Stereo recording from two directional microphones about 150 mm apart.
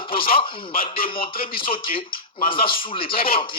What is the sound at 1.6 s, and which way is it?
Speech, 35° left (ahead or behind).